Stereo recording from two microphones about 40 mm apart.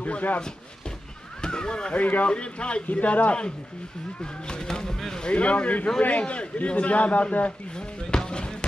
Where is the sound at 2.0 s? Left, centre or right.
Left.